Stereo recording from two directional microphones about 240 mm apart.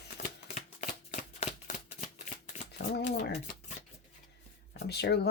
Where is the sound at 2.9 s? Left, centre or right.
Left.